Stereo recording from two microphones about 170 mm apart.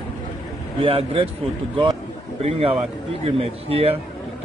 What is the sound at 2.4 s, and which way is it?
A man's voice, 35° right (ahead or behind).